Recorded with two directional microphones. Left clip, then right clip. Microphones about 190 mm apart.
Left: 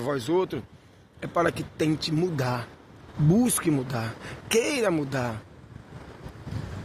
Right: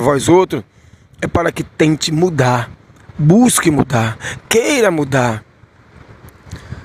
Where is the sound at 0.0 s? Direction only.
45° right (ahead or behind).